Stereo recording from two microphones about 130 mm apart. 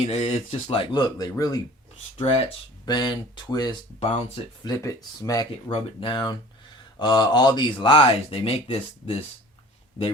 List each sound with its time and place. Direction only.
0.1 s speech: 55° left (ahead or behind); by 1.6 s 25° left (ahead or behind)
2.1 s speech: 50° left (ahead or behind)
2.8 s speech: 35° left (ahead or behind)
5.7 s speech: 40° left (ahead or behind)